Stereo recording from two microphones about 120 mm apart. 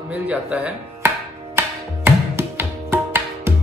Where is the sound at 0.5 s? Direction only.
10° right (ahead or behind).